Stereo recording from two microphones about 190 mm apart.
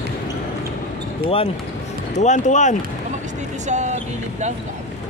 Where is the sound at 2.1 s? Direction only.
40° left (ahead or behind).